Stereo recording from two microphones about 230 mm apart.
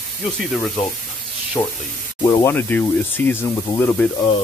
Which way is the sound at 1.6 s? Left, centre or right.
Centre.